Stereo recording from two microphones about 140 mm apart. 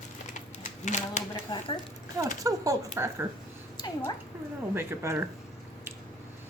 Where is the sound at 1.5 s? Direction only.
30° left (ahead or behind).